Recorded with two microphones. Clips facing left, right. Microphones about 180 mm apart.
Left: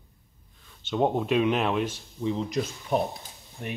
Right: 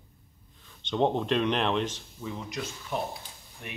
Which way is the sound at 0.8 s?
5° left (ahead or behind).